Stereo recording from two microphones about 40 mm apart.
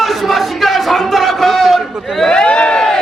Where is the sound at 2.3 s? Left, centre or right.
Left.